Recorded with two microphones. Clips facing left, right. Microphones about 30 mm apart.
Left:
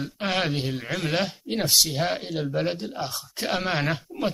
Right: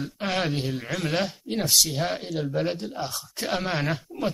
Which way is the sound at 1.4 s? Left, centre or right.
Centre.